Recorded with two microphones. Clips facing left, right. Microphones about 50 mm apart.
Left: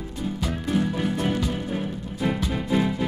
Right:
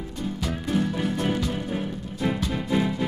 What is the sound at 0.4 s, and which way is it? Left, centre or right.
Music, centre.